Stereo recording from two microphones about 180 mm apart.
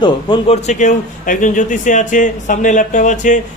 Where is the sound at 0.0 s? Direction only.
30° left (ahead or behind).